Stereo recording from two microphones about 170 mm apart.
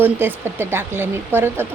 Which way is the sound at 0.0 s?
10° right (ahead or behind).